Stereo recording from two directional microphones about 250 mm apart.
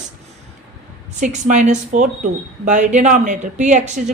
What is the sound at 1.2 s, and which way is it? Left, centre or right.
Speech, right.